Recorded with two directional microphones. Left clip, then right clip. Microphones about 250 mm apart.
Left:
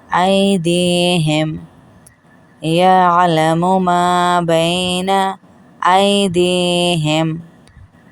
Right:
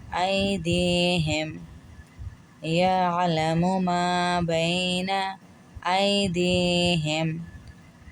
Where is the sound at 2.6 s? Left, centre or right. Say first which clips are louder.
Left 12 dB; left.